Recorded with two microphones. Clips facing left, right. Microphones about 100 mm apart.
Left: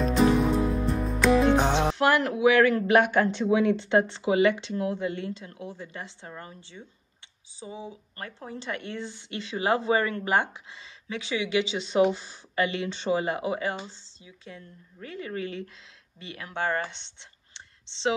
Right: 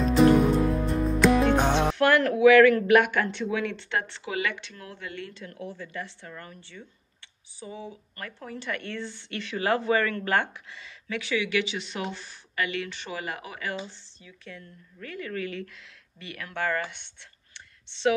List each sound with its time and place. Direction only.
0.0 s music: centre (ahead or behind)
2.0 s a woman's voice: 20° left (ahead or behind)